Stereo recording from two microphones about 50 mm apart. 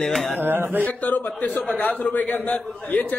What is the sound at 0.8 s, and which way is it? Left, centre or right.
A man's voice, left.